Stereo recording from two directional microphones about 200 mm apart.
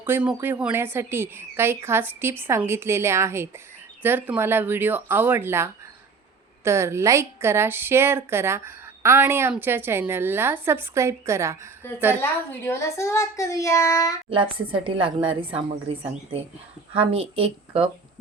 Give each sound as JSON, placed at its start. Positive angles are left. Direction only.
{"t": 0.0, "sound": "a woman's voice", "side_deg": -10}
{"t": 11.8, "sound": "a child's voice", "side_deg": 10}
{"t": 14.3, "sound": "a woman's voice", "side_deg": -25}